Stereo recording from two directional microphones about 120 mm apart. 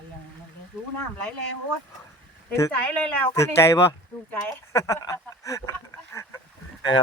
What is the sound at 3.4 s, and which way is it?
Speech, 25° left (ahead or behind).